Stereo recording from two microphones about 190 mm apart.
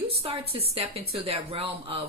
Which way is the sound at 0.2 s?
30° right (ahead or behind).